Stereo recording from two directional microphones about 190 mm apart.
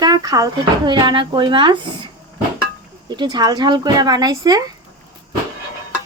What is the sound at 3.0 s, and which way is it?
Speech, 20° right (ahead or behind).